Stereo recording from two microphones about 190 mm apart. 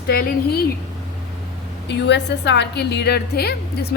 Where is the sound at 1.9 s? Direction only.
65° left (ahead or behind).